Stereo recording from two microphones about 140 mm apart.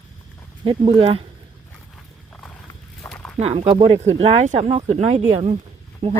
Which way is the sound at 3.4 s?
45° right (ahead or behind).